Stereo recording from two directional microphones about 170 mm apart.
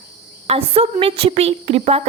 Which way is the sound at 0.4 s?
35° right (ahead or behind).